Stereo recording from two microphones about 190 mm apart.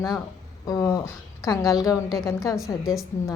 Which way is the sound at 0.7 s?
20° left (ahead or behind).